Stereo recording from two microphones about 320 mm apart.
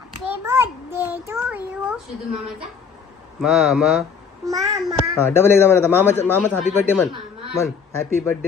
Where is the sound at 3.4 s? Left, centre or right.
Centre.